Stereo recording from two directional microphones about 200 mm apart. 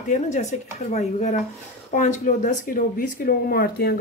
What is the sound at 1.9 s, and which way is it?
Speech, 40° left (ahead or behind).